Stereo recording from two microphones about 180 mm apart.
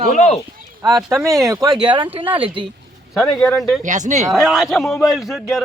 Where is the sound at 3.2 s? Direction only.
5° left (ahead or behind).